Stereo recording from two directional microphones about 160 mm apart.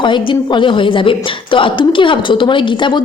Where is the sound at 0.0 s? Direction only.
30° left (ahead or behind).